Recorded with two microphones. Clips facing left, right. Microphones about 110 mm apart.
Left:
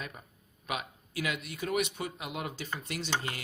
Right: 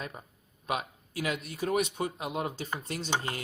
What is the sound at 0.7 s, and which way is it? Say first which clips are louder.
Speech: right 4 dB; 35° right (ahead or behind).